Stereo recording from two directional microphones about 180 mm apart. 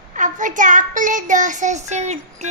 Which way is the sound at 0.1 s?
45° right (ahead or behind).